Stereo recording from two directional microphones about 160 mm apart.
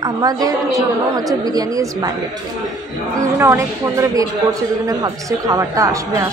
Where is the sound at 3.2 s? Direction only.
20° right (ahead or behind).